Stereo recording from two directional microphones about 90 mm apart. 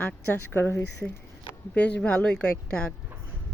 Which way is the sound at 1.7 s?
15° left (ahead or behind).